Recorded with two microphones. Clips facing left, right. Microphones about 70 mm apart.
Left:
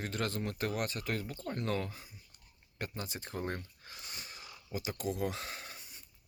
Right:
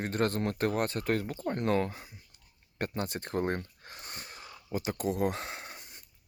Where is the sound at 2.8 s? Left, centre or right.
Right.